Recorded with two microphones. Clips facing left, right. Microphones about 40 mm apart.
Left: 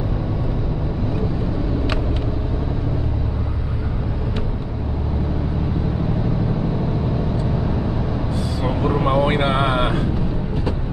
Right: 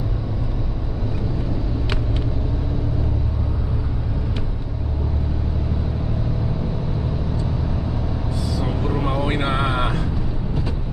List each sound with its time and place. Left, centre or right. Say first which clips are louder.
8.5 s vehicle: left 4 dB; left